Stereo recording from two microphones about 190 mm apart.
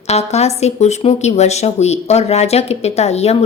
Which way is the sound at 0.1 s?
35° left (ahead or behind).